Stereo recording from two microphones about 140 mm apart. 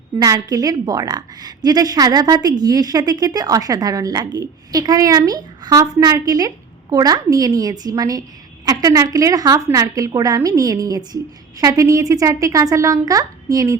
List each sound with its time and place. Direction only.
0.2 s a woman's voice: 25° right (ahead or behind)